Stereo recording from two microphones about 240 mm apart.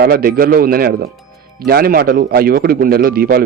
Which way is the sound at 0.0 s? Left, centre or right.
Right.